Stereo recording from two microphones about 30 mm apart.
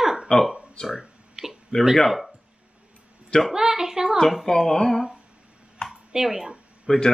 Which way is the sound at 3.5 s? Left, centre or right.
Centre.